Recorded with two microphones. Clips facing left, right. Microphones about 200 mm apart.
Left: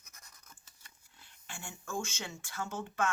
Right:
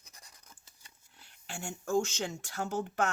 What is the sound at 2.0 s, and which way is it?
Speech, 40° right (ahead or behind).